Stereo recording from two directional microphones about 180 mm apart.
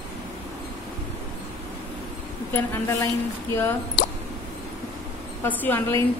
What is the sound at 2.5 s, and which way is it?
Speech, 15° left (ahead or behind).